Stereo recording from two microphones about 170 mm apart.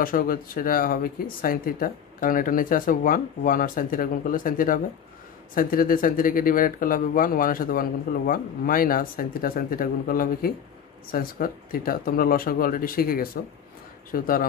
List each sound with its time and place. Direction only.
0.0 s speech: 55° left (ahead or behind)